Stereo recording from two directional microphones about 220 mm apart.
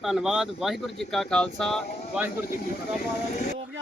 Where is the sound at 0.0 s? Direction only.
Centre (ahead or behind).